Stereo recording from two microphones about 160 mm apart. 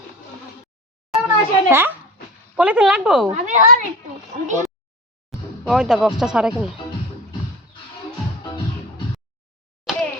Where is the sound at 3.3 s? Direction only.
50° right (ahead or behind).